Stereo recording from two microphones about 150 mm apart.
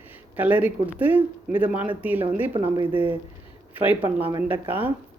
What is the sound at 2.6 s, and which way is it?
Speech, 30° right (ahead or behind).